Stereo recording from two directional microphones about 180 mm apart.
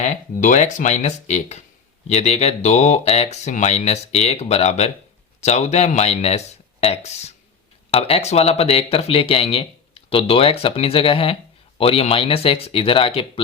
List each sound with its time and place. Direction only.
0.0 s speech: 40° left (ahead or behind)